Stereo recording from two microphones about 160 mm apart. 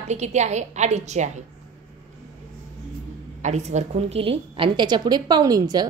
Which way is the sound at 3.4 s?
45° right (ahead or behind).